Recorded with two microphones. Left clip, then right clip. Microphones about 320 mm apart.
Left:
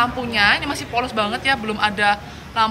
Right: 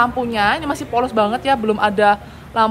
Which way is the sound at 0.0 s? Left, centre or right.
Centre.